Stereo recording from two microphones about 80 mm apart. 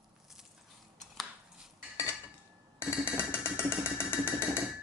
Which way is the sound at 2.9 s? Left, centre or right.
Centre.